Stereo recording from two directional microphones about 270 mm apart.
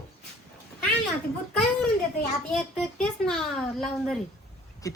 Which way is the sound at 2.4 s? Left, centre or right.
Centre.